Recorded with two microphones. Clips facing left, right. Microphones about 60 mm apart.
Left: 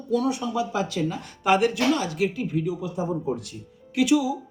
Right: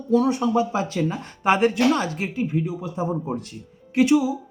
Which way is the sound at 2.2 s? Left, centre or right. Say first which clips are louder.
Even; right.